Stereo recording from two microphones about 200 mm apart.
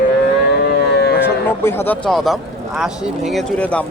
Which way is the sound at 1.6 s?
10° left (ahead or behind).